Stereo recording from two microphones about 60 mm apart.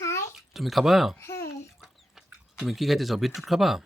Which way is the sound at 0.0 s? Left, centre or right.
Left.